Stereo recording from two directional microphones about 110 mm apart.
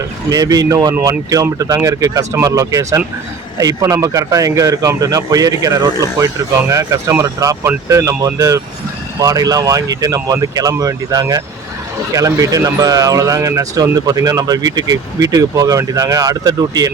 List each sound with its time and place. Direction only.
0.3 s speech: 35° right (ahead or behind)